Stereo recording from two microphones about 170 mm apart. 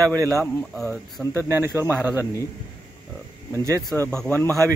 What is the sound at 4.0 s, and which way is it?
Speech, 10° left (ahead or behind).